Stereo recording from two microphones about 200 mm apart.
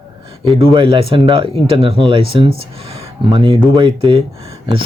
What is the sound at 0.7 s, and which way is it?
Speech, 25° right (ahead or behind).